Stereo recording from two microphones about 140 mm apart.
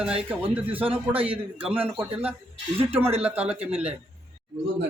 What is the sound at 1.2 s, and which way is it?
Speech, 40° right (ahead or behind).